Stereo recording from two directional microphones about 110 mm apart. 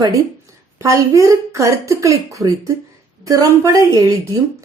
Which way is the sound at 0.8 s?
30° right (ahead or behind).